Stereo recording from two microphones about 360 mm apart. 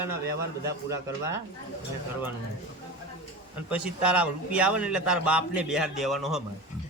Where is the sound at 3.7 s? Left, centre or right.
Centre.